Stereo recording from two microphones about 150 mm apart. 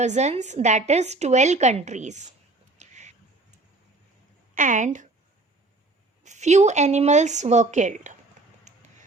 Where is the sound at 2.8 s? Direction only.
50° right (ahead or behind).